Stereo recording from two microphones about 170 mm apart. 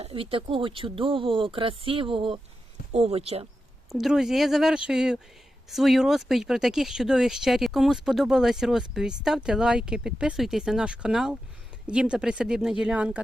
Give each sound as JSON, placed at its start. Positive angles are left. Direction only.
{"t": 0.0, "sound": "speech", "side_deg": -30}
{"t": 3.9, "sound": "speech", "side_deg": 0}